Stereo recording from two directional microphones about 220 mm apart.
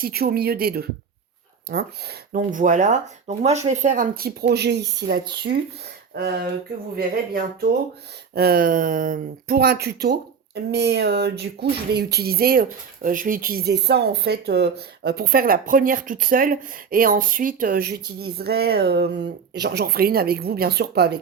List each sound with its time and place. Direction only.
0.0 s speech: 45° right (ahead or behind)